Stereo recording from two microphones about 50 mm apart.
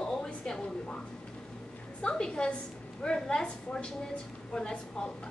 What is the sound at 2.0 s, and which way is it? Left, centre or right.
A woman's voice, centre.